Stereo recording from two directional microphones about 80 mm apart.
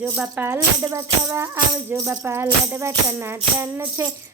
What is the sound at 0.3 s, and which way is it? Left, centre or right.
Music, right.